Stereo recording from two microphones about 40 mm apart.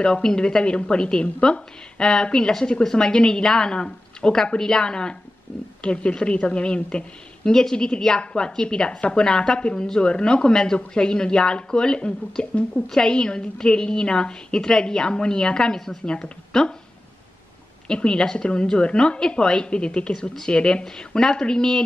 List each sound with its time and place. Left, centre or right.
0.0 s a woman's voice: left
17.8 s a woman's voice: centre